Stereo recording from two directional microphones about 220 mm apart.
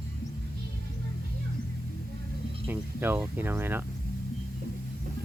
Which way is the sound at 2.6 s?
10° right (ahead or behind).